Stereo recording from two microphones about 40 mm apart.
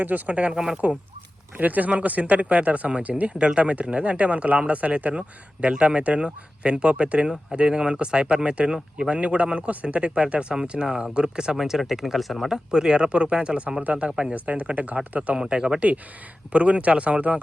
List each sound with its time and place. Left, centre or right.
0.3 s speech: right
0.5 s speech: centre
1.5 s speech: right
3.3 s speech: right
10.8 s speech: centre
11.5 s speech: centre
12.7 s speech: right
13.8 s speech: right
14.3 s speech: right
15.4 s speech: centre
16.5 s speech: right